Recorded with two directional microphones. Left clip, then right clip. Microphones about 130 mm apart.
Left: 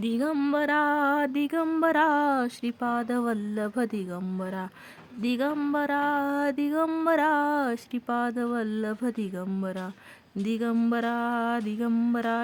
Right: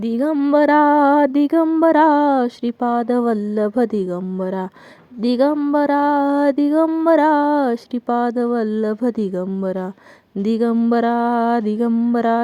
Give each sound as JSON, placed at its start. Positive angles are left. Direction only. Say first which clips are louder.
{"t": 0.0, "sound": "a sound", "louder": "right 8 dB", "side_deg": -40}
{"t": 0.3, "sound": "music", "louder": "right 9 dB", "side_deg": -20}
{"t": 0.5, "sound": "music", "louder": "right 13 dB", "side_deg": -50}
{"t": 1.8, "sound": "a sound", "louder": "right 9 dB", "side_deg": -40}
{"t": 5.2, "sound": "music", "louder": "right 12 dB", "side_deg": -45}
{"t": 5.5, "sound": "speech", "louder": "right 10 dB", "side_deg": -20}
{"t": 5.7, "sound": "a sound", "louder": "right 8 dB", "side_deg": -40}
{"t": 6.8, "sound": "speech", "louder": "right 9 dB", "side_deg": -15}
{"t": 7.1, "sound": "a sound", "louder": "right 9 dB", "side_deg": -40}
{"t": 10.4, "sound": "music", "louder": "right 12 dB", "side_deg": -50}
{"t": 10.7, "sound": "music", "louder": "right 9 dB", "side_deg": -20}
{"t": 10.9, "sound": "music", "louder": "right 11 dB", "side_deg": -50}
{"t": 11.9, "sound": "music", "louder": "right 8 dB", "side_deg": -20}
{"t": 12.1, "sound": "music", "louder": "right 13 dB", "side_deg": -50}